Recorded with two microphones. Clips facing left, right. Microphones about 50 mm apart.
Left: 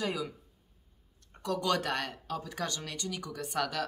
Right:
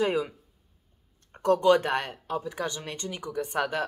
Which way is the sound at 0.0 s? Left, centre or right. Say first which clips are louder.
Right 8 dB; right.